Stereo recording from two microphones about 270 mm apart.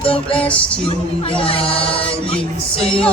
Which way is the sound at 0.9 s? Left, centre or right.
Centre.